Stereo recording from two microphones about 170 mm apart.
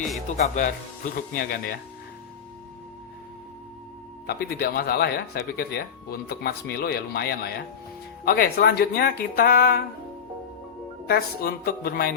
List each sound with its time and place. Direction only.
0.3 s speech: 45° left (ahead or behind)
4.3 s speech: 65° left (ahead or behind)
11.0 s speech: 60° left (ahead or behind)